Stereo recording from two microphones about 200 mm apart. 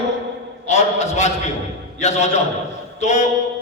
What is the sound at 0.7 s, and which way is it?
A man's voice, 35° left (ahead or behind).